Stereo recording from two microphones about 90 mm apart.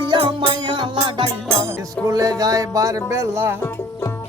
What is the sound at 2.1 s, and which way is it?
Music, 40° right (ahead or behind).